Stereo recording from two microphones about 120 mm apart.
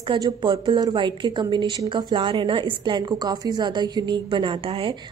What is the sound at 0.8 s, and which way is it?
A woman's voice, 35° right (ahead or behind).